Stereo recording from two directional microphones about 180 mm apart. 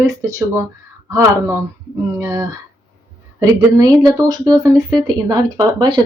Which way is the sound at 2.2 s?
15° right (ahead or behind).